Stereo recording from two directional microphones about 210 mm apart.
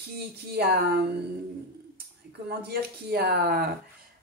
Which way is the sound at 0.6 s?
50° right (ahead or behind).